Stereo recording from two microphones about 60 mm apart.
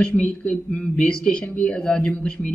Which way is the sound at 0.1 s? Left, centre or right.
Centre.